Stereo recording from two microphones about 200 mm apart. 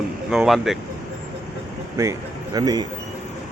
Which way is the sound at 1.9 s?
15° right (ahead or behind).